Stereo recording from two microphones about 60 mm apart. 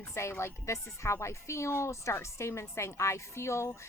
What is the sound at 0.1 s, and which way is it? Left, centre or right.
Speech, left.